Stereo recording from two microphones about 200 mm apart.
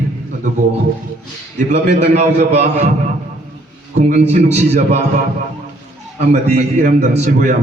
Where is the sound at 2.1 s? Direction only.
35° right (ahead or behind).